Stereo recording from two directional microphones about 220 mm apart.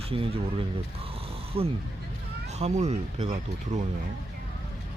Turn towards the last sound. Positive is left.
turn(degrees=-30)  # may be behind; listen again after turning